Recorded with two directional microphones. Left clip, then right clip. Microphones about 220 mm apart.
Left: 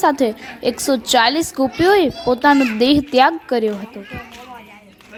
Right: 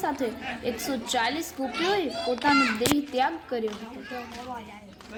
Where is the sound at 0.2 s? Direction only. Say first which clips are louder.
Left 11 dB; 45° left (ahead or behind).